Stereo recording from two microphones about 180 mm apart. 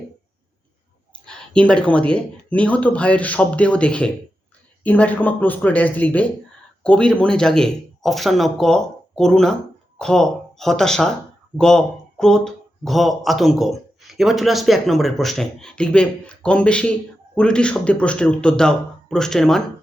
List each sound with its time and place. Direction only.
1.2 s speech: 5° left (ahead or behind)